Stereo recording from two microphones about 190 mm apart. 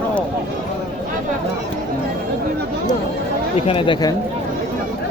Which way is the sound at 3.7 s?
25° left (ahead or behind).